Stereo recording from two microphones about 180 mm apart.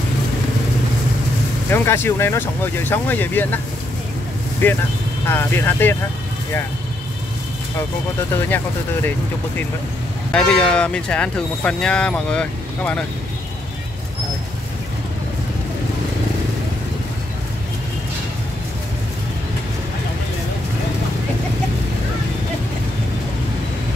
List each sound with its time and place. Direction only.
1.7 s speech: 15° left (ahead or behind)
10.3 s speech: 5° left (ahead or behind)